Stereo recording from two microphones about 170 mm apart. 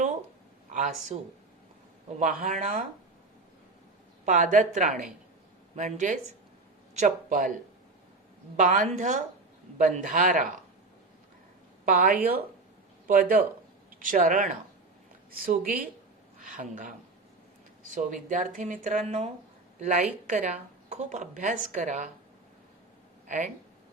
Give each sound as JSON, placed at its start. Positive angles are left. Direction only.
{"t": 1.1, "sound": "speech", "side_deg": -35}
{"t": 2.1, "sound": "a woman's voice", "side_deg": -50}
{"t": 4.3, "sound": "a woman's voice", "side_deg": -50}
{"t": 11.9, "sound": "a woman's voice", "side_deg": -55}